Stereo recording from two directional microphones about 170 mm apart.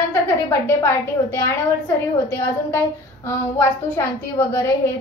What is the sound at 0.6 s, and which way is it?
A woman's voice, 15° left (ahead or behind).